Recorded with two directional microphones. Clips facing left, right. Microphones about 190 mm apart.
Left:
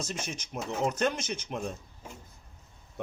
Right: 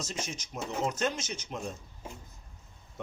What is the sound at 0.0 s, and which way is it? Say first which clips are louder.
Speech: left 1 dB; 55° left (ahead or behind).